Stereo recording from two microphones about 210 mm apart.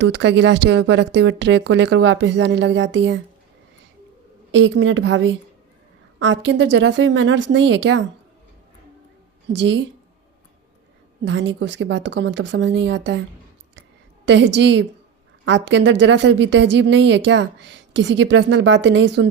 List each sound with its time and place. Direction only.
0.0 s a woman's voice: 60° right (ahead or behind)
4.5 s a woman's voice: 60° right (ahead or behind)
9.6 s a woman's voice: 55° right (ahead or behind)
11.3 s a woman's voice: 60° right (ahead or behind)
14.3 s a woman's voice: 60° right (ahead or behind)